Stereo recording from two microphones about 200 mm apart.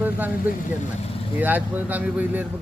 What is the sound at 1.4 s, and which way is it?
Speech, 10° right (ahead or behind).